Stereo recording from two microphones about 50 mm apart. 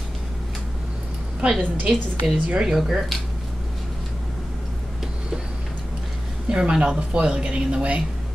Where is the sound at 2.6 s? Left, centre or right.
Centre.